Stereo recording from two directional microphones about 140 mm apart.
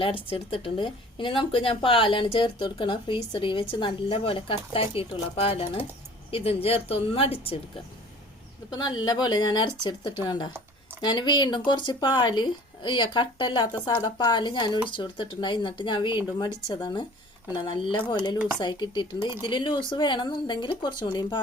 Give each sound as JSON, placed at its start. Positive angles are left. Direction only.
{"t": 0.0, "sound": "a woman's voice", "side_deg": 40}
{"t": 8.7, "sound": "speech", "side_deg": 30}